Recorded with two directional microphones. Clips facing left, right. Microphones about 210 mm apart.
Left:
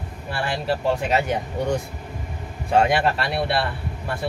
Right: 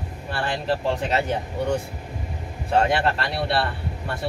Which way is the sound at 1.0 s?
10° left (ahead or behind).